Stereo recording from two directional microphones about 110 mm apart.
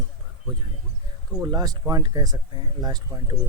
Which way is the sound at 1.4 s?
35° right (ahead or behind).